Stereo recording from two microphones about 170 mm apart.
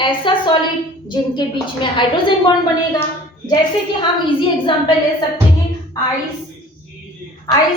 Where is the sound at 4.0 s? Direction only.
30° left (ahead or behind).